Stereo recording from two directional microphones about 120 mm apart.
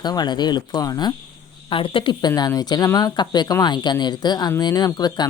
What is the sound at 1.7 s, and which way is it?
Speech, 45° left (ahead or behind).